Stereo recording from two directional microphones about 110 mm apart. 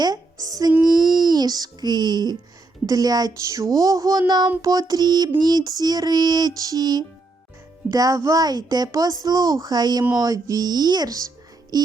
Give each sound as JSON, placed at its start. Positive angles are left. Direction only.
{"t": 0.0, "sound": "music", "side_deg": -35}
{"t": 0.9, "sound": "a sound", "side_deg": -40}
{"t": 2.8, "sound": "child singing", "side_deg": -35}